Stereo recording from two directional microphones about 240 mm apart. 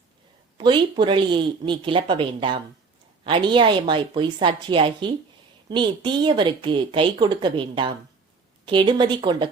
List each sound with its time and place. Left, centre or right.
0.5 s a woman's voice: centre